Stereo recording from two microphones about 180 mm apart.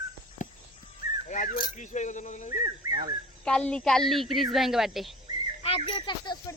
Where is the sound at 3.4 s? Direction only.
5° left (ahead or behind).